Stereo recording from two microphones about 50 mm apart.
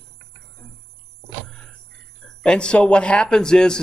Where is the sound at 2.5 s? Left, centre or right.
Left.